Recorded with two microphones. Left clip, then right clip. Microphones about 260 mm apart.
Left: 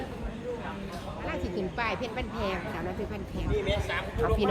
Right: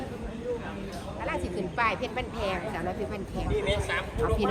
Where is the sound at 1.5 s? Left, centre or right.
Right.